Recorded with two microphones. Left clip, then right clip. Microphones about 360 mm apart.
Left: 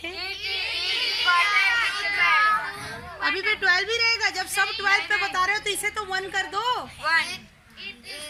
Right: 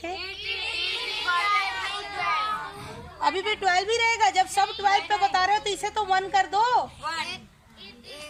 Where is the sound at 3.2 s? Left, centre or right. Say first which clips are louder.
Left 1 dB; centre.